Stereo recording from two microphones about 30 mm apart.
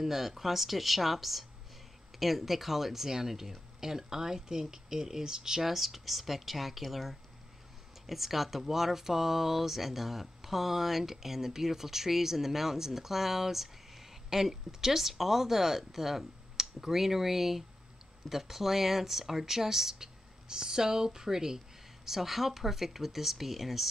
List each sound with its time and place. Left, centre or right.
0.0 s speech: centre
5.7 s speech: centre
22.0 s speech: centre